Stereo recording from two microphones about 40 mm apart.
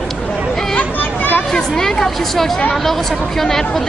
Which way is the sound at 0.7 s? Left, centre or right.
Left.